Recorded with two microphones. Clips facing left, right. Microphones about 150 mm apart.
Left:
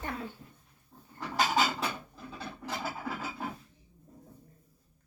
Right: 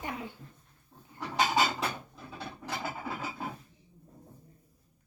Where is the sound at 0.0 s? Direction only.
15° right (ahead or behind).